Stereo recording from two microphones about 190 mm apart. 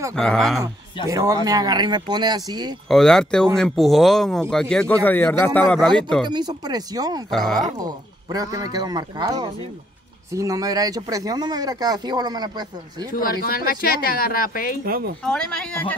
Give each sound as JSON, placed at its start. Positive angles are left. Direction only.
{"t": 0.1, "sound": "speech", "side_deg": 5}
{"t": 1.0, "sound": "speech", "side_deg": -20}
{"t": 2.9, "sound": "speech", "side_deg": 5}
{"t": 6.2, "sound": "speech", "side_deg": -20}
{"t": 7.2, "sound": "speech", "side_deg": 0}
{"t": 7.8, "sound": "speech", "side_deg": -20}
{"t": 13.1, "sound": "speech", "side_deg": 50}
{"t": 14.9, "sound": "speech", "side_deg": -50}
{"t": 15.2, "sound": "speech", "side_deg": 5}